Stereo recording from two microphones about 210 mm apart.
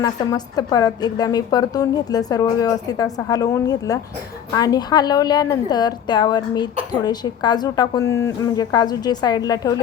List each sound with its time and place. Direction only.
0.0 s a woman's voice: 20° left (ahead or behind)